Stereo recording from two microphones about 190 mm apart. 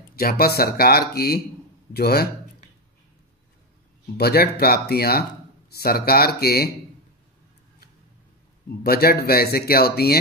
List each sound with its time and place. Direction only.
0.1 s speech: 50° left (ahead or behind)
4.2 s speech: 55° left (ahead or behind)
8.8 s speech: 55° left (ahead or behind)